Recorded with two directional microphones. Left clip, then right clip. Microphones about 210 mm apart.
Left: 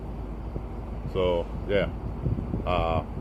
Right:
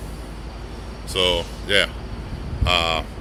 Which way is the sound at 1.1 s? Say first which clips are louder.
Right 5 dB; 10° right (ahead or behind).